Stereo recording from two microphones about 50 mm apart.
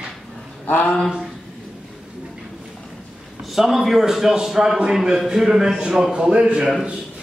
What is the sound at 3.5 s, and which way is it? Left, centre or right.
A man's voice, centre.